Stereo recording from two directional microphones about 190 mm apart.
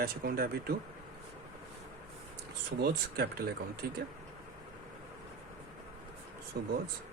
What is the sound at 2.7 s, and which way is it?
Speech, 55° right (ahead or behind).